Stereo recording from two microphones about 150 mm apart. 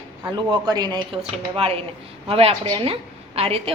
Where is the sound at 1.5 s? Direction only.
40° right (ahead or behind).